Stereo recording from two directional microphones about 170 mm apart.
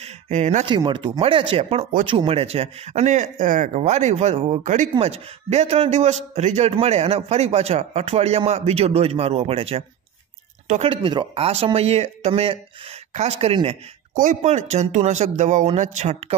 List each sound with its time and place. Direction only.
0.0 s a sound: 45° right (ahead or behind)
0.7 s a man's voice: 30° right (ahead or behind)
14.1 s speech: 45° right (ahead or behind)